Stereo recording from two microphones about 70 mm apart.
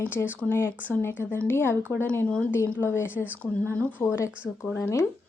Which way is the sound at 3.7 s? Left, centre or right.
Left.